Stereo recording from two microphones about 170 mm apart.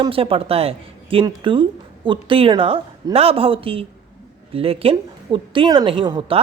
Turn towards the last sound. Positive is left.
turn(degrees=-30)  # may be behind; listen again after turning